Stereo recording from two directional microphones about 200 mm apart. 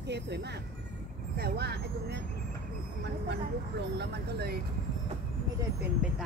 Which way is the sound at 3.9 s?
55° right (ahead or behind).